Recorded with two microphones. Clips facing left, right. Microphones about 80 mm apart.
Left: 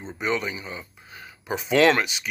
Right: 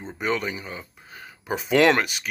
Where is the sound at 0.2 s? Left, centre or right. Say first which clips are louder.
Even; right.